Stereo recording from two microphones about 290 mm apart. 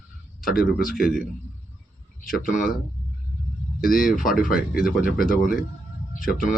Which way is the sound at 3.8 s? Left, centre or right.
Left.